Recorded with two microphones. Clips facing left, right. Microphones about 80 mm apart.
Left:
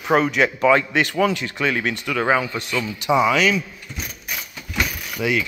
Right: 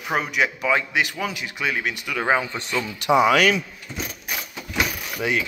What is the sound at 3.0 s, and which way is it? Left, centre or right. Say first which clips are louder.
Speech: right 1 dB; right.